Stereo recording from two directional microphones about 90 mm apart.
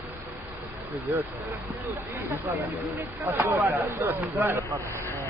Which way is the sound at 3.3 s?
20° right (ahead or behind).